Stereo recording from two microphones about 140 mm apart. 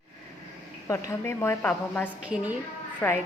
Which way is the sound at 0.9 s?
20° left (ahead or behind).